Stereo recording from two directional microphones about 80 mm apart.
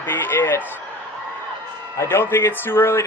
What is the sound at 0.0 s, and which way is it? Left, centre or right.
Speech, left.